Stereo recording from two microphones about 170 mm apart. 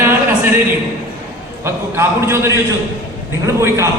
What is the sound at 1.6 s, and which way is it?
A man's voice, 15° right (ahead or behind).